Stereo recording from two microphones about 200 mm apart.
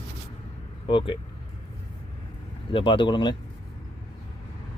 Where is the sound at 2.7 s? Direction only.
25° left (ahead or behind).